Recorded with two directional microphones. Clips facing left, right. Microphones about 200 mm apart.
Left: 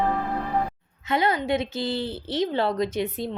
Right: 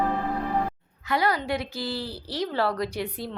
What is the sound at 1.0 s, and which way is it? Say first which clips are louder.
A woman's voice: left 2 dB; 20° left (ahead or behind).